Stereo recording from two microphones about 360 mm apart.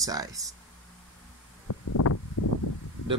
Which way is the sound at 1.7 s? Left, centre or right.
Left.